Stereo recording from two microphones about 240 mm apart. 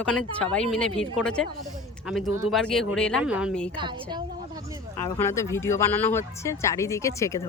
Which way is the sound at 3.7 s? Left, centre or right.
Centre.